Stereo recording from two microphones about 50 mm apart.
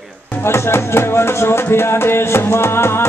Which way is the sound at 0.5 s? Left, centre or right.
Left.